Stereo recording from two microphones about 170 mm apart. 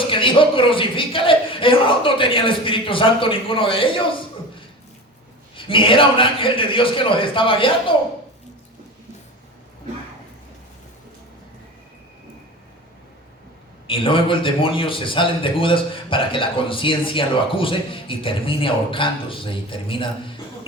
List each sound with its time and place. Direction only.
0.1 s a man's voice: 30° left (ahead or behind)
5.5 s a man's voice: 30° left (ahead or behind)
13.8 s a man's voice: 30° left (ahead or behind)